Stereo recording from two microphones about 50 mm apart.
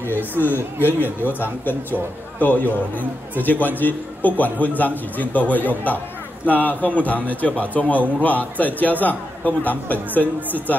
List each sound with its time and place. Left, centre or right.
0.4 s a man's voice: left